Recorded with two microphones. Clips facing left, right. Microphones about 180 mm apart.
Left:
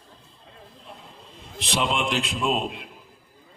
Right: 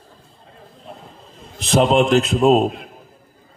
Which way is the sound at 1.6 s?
45° right (ahead or behind).